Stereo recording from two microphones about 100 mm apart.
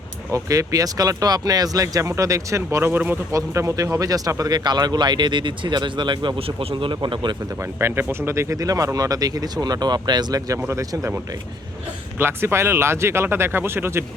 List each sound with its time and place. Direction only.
0.3 s speech: 35° right (ahead or behind)
3.3 s speech: 30° right (ahead or behind); by 6.4 s 50° right (ahead or behind)
6.6 s speech: 65° right (ahead or behind)
7.8 s speech: 25° right (ahead or behind); by 10.6 s 40° right (ahead or behind)
10.6 s speech: 30° right (ahead or behind)
12.2 s speech: 25° right (ahead or behind)